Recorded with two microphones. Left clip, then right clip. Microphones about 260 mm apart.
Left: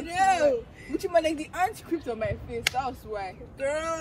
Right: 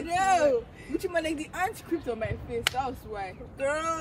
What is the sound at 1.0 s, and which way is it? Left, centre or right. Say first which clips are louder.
Speech: left 6 dB; centre.